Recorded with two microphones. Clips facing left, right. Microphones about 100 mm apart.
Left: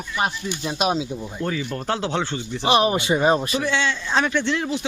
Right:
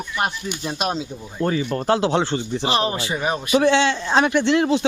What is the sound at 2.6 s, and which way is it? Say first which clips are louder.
Speech: left 6 dB; 20° left (ahead or behind).